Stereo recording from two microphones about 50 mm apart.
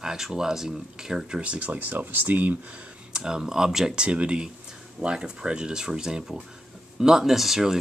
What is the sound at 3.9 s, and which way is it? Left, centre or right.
Speech, right.